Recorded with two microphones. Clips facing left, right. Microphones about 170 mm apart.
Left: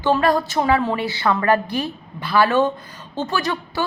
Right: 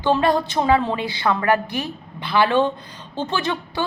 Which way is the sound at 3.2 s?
20° right (ahead or behind).